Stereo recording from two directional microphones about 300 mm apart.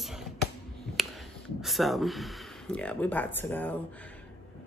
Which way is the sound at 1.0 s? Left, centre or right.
Centre.